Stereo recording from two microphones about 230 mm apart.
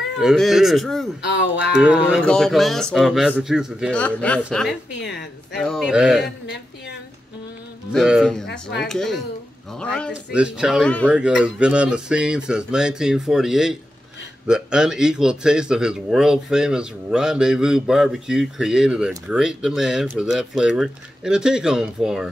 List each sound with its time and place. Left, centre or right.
0.2 s speech: centre
1.2 s a woman's voice: left
1.8 s speech: centre
5.0 s a woman's voice: left
5.6 s speech: centre
7.9 s speech: centre